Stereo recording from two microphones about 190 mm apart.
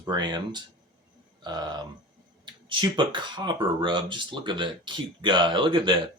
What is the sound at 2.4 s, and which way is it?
Speech, 25° right (ahead or behind).